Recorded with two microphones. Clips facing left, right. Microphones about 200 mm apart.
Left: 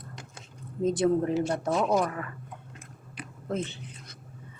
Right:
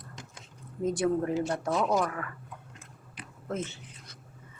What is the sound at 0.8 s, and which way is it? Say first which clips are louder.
A man's voice: left 3 dB; 20° left (ahead or behind).